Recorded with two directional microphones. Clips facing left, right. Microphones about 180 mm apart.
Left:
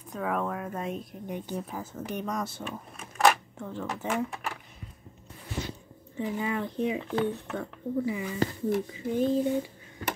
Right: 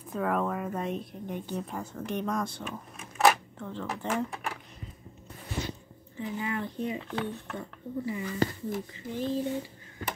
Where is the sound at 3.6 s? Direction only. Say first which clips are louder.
Left 1 dB; 10° left (ahead or behind).